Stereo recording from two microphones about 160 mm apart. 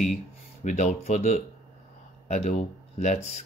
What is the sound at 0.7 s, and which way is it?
Speech, 45° left (ahead or behind).